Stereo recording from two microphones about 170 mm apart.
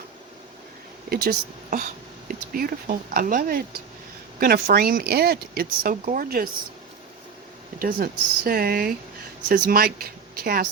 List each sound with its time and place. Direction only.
1.1 s speech: 65° right (ahead or behind)
7.8 s speech: 55° right (ahead or behind)